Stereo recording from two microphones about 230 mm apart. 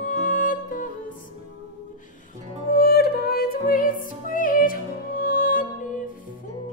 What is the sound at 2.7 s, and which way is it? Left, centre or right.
Music, left.